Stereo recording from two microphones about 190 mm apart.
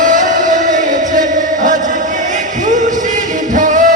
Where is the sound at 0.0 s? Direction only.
40° right (ahead or behind).